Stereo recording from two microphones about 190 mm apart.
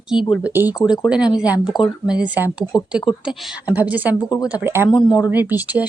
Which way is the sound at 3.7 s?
10° right (ahead or behind).